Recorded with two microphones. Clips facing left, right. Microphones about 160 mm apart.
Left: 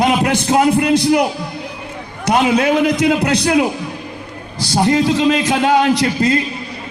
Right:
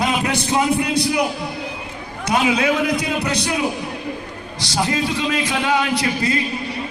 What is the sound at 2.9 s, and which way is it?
Speech, 80° left.